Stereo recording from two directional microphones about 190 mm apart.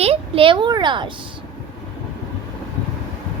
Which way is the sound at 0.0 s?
30° right (ahead or behind).